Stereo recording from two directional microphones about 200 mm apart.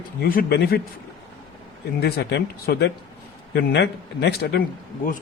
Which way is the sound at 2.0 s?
55° left (ahead or behind).